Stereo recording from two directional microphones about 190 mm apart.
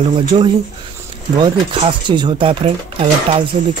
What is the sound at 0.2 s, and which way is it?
Speech, 25° right (ahead or behind).